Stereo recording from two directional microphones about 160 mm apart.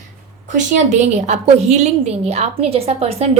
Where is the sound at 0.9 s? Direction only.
45° right (ahead or behind).